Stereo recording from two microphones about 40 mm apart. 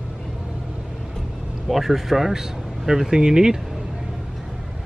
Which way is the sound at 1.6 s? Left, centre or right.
Centre.